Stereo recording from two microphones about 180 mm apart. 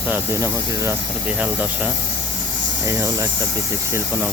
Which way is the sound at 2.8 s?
20° right (ahead or behind).